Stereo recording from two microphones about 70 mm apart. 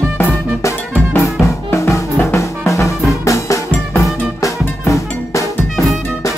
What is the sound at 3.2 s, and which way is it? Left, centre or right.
Music, left.